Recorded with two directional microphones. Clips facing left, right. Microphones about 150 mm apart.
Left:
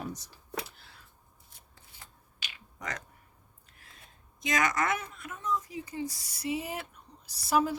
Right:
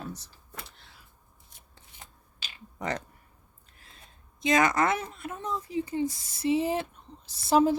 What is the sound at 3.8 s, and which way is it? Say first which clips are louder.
A woman's voice: right 2 dB; 30° right (ahead or behind).